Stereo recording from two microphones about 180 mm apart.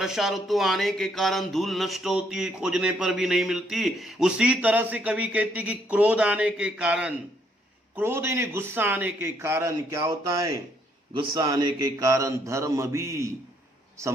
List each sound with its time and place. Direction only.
0.0 s mantra: centre (ahead or behind)
7.9 s a man's voice: 10° right (ahead or behind)